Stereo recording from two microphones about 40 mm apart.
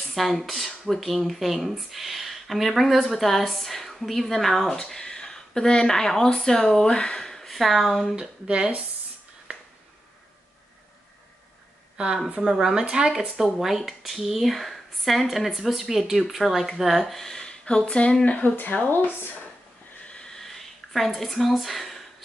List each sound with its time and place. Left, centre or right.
0.1 s speech: centre
4.7 s speech: centre
8.2 s speech: right
12.4 s speech: centre
13.2 s speech: centre
17.1 s speech: centre; by 18.5 s left
18.9 s speech: left
20.1 s a sound: left
20.3 s a sound: centre
21.4 s speech: centre